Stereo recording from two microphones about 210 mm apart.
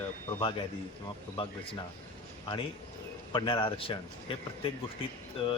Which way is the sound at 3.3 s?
25° left (ahead or behind).